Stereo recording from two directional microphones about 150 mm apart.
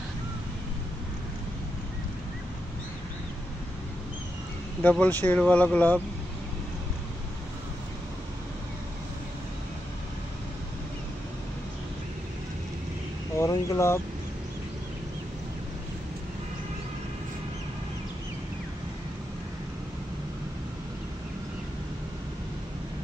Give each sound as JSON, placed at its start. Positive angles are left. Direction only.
{"t": 4.8, "sound": "speech", "side_deg": 10}
{"t": 13.4, "sound": "speech", "side_deg": 20}